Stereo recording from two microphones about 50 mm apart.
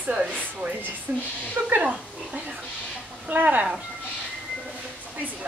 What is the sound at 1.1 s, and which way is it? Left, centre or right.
Speech, right.